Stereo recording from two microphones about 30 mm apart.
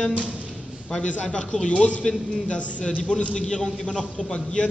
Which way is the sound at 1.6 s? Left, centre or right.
Left.